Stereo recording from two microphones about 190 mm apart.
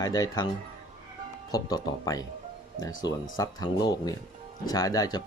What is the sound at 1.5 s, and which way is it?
Speech, 20° left (ahead or behind).